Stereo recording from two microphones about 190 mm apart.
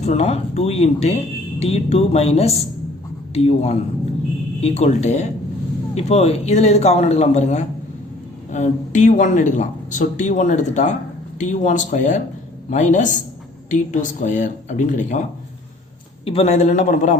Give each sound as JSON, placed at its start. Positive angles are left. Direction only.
{"t": 0.0, "sound": "speech", "side_deg": 35}
{"t": 16.2, "sound": "speech", "side_deg": 30}